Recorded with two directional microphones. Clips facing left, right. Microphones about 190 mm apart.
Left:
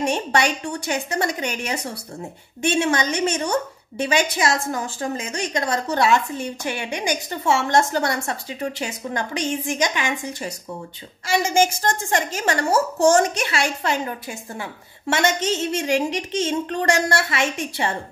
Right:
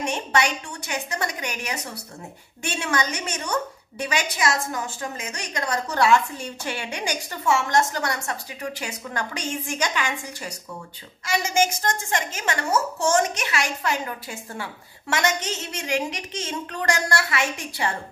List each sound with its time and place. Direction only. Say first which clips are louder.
0.0 s a woman's voice: left 3 dB; 30° left (ahead or behind)
11.2 s a woman's voice: left 4 dB; 30° left (ahead or behind)